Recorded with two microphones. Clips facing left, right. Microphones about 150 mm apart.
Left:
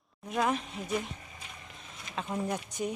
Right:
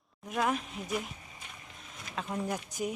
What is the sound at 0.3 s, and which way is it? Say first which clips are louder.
Speech: left 1 dB; centre (ahead or behind).